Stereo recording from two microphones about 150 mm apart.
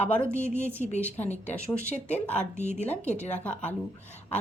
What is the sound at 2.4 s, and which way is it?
Speech, 50° left (ahead or behind).